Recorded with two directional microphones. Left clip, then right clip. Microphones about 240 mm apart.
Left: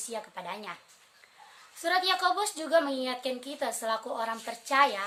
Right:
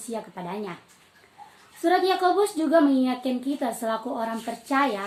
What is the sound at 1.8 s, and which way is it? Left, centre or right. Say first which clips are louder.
A woman's voice: right 5 dB; left.